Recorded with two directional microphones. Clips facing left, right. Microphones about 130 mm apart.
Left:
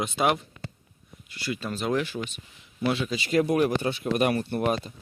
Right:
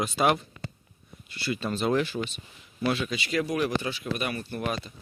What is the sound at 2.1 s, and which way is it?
Speech, 5° right (ahead or behind).